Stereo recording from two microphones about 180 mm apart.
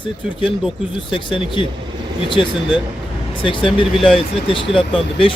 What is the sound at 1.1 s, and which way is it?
A man's voice, 25° left (ahead or behind).